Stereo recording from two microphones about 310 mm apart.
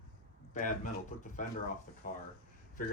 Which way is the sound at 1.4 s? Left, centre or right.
Left.